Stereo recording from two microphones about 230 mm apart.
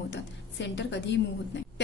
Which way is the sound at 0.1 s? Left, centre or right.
Left.